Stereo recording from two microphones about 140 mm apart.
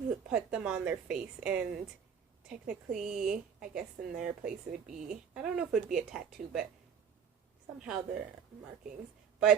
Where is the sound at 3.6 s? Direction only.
5° right (ahead or behind).